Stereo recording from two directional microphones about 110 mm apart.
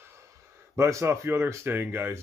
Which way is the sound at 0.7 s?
25° right (ahead or behind).